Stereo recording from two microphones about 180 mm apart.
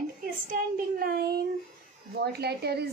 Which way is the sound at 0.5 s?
55° right (ahead or behind).